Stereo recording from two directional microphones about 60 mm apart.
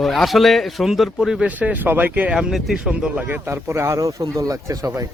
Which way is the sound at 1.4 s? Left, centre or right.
Right.